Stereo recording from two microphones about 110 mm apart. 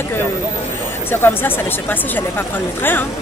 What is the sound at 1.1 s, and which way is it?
Speech, 20° left (ahead or behind).